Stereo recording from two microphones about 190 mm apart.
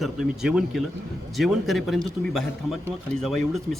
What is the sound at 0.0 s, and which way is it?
Speech, centre (ahead or behind).